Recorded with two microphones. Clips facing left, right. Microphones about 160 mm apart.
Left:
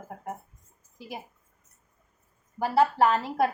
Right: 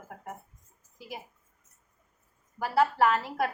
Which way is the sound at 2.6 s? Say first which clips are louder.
Left 2 dB; 25° left (ahead or behind).